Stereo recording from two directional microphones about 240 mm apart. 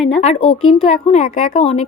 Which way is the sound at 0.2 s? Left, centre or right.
Left.